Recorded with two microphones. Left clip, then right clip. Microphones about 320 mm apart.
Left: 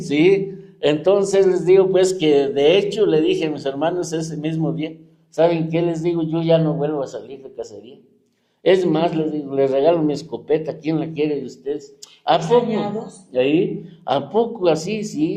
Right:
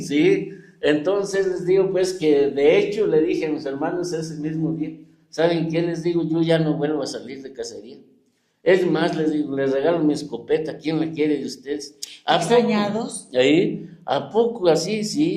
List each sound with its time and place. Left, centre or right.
0.1 s a man's voice: left
8.6 s a man's voice: left
13.3 s a man's voice: centre